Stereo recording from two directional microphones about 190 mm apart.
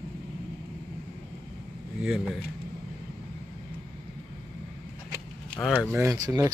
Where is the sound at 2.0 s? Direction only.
5° right (ahead or behind).